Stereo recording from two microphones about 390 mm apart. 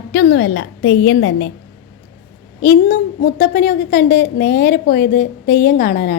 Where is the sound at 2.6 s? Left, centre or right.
Left.